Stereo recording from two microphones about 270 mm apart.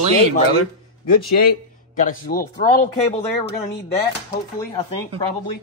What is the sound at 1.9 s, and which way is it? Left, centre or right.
Speech, left.